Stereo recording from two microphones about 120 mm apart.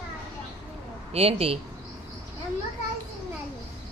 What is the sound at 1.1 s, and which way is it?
Speech, 55° right (ahead or behind).